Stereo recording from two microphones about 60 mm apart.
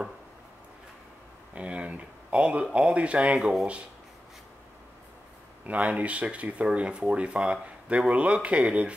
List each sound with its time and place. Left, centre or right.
1.5 s speech: centre
5.7 s speech: right